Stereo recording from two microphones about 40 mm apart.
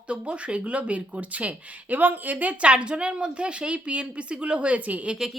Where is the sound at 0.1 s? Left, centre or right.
Right.